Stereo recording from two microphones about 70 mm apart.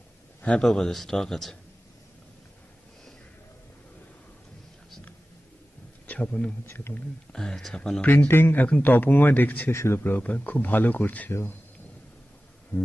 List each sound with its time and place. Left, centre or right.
0.4 s a man's voice: centre
6.0 s a man's voice: centre
6.6 s speech: left
7.3 s speech: centre
8.0 s speech: left
8.3 s speech: left
9.7 s speech: left
12.7 s a sound: left